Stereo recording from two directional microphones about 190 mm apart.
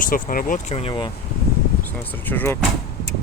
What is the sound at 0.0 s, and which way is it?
Speech, 45° left (ahead or behind).